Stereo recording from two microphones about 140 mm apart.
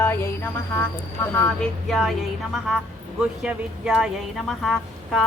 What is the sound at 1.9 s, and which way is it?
A woman's voice, centre (ahead or behind).